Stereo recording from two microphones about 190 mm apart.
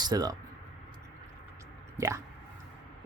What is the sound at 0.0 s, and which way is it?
Speech, 20° right (ahead or behind).